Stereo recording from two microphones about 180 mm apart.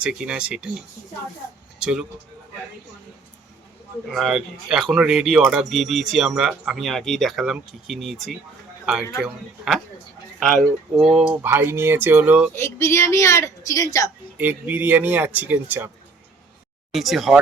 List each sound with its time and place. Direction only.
0.0 s speech: 5° right (ahead or behind)
1.8 s speech: 5° right (ahead or behind)
4.1 s speech: centre (ahead or behind)
12.5 s a woman's voice: 15° left (ahead or behind)
14.3 s speech: 10° right (ahead or behind)
16.9 s speech: centre (ahead or behind)